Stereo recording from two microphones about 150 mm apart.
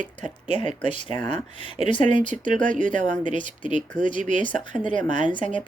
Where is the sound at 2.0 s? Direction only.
55° right (ahead or behind).